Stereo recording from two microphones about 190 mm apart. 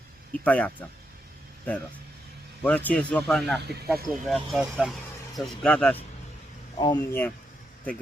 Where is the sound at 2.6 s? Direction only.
5° left (ahead or behind).